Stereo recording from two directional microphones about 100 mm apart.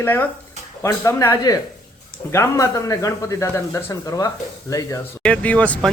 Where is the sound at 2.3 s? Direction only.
30° left (ahead or behind).